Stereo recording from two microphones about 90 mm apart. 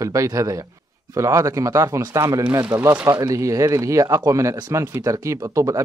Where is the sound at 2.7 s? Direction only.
25° right (ahead or behind).